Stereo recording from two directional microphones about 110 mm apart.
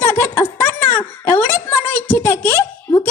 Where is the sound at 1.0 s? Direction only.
15° left (ahead or behind).